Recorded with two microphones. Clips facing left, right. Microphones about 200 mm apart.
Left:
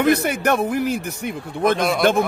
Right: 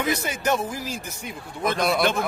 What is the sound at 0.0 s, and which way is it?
A man's voice, 60° left (ahead or behind).